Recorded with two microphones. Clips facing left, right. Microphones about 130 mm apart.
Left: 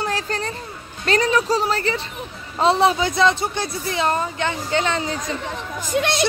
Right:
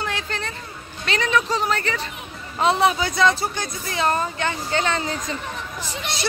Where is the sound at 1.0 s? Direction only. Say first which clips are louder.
Left 3 dB; 40° left (ahead or behind); by 5.0 s 20° left (ahead or behind).